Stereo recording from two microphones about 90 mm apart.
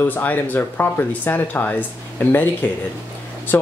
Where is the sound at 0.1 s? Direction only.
20° left (ahead or behind).